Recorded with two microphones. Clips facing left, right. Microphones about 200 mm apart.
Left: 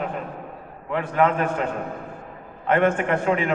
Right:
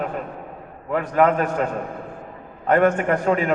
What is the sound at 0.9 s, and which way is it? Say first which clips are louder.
Speech: right 3 dB; 40° right (ahead or behind).